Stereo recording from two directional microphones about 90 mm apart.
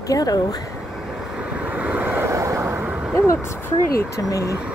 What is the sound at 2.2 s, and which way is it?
Vehicle, 35° right (ahead or behind).